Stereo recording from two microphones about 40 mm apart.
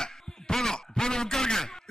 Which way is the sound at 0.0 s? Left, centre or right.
Centre.